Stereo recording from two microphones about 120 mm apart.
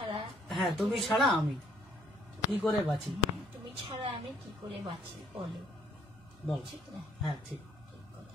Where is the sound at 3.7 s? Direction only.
45° right (ahead or behind).